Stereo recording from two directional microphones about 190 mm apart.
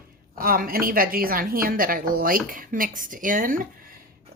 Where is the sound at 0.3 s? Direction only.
50° right (ahead or behind).